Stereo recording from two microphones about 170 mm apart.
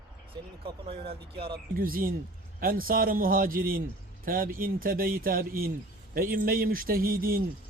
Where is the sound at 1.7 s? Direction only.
55° right (ahead or behind).